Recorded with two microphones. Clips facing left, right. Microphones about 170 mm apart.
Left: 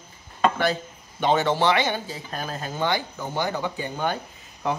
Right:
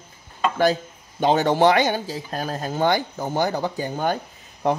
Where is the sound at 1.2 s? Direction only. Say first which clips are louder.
Right 4 dB; 40° right (ahead or behind).